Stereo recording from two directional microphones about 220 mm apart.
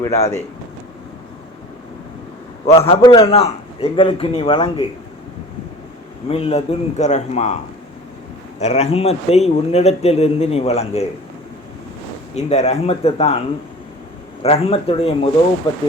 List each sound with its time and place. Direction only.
0.1 s speech: 30° left (ahead or behind)
2.6 s speech: 25° left (ahead or behind)
6.2 s speech: 25° left (ahead or behind)
12.3 s speech: 30° left (ahead or behind)
14.4 s speech: 25° left (ahead or behind)